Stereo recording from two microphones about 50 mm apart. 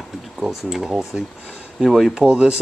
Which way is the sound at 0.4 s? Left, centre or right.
Centre.